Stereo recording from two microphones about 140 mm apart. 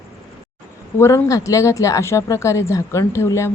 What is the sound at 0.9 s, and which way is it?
Speech, 20° left (ahead or behind).